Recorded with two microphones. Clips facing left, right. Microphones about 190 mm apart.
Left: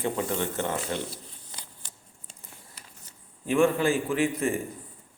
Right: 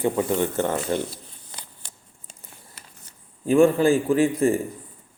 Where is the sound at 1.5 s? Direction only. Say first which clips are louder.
Right 3 dB; 65° right (ahead or behind).